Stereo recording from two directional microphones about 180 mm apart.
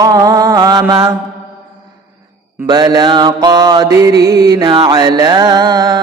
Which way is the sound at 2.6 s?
20° right (ahead or behind).